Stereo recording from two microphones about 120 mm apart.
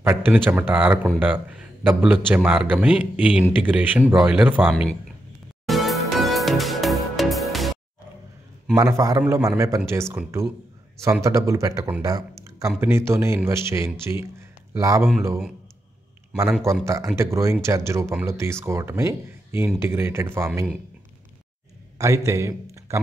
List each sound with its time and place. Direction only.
0.0 s speech: 20° right (ahead or behind)
5.7 s music: centre (ahead or behind)
8.7 s speech: 25° right (ahead or behind)
16.8 s speech: 25° right (ahead or behind)
21.9 s a man's voice: 25° right (ahead or behind)